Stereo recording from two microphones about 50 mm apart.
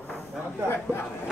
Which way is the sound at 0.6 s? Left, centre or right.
Left.